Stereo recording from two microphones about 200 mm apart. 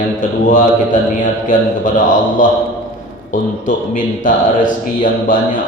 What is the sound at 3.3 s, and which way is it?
Speech, 40° left (ahead or behind).